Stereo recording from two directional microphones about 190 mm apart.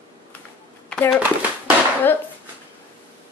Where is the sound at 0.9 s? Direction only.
5° left (ahead or behind).